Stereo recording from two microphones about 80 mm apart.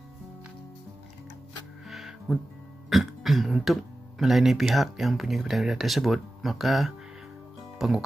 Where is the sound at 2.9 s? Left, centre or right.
Centre.